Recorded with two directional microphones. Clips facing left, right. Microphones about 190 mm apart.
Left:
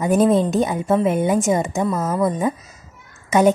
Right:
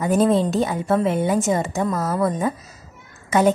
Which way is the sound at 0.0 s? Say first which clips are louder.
Left 2 dB; 15° left (ahead or behind).